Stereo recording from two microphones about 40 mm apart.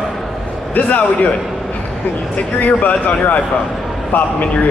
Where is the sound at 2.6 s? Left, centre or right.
Left.